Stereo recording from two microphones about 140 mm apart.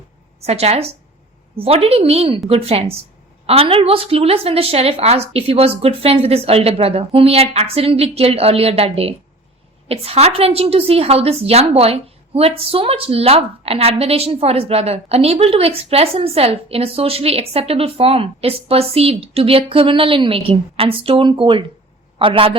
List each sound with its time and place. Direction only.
0.4 s a woman's voice: 50° right (ahead or behind)